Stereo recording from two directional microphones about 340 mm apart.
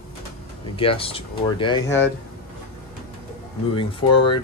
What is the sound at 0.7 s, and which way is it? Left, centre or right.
Speech, centre.